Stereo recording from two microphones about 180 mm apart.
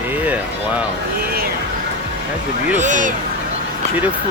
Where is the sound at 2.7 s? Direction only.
45° right (ahead or behind).